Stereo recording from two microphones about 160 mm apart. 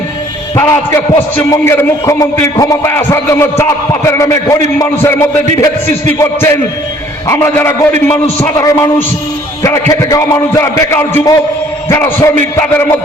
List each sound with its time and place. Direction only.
0.5 s a man's voice: 15° left (ahead or behind)